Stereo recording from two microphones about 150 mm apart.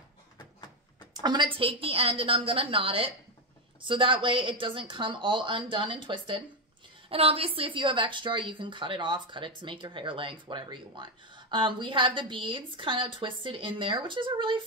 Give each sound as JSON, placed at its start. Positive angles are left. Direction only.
{"t": 1.2, "sound": "speech", "side_deg": -30}